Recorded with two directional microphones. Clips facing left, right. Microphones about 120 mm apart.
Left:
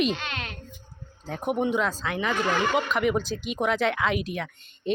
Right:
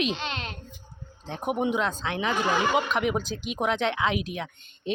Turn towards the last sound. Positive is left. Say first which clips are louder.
# left 3 dB
turn(degrees=0)  # may be behind; listen again after turning